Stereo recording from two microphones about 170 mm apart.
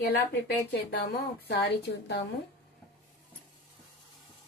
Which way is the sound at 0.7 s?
75° left (ahead or behind).